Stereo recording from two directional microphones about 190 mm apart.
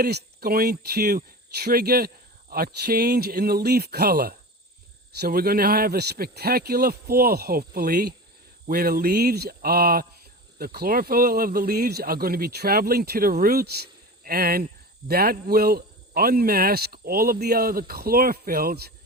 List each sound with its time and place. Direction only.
0.0 s a man's voice: 55° right (ahead or behind)